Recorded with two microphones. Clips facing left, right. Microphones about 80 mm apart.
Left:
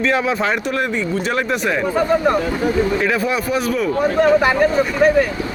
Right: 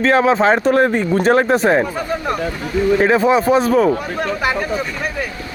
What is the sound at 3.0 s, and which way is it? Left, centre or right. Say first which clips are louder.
Speech: right 6 dB; right.